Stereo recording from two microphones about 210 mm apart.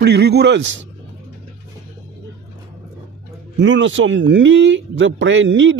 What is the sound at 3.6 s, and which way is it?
Speech, 60° right (ahead or behind).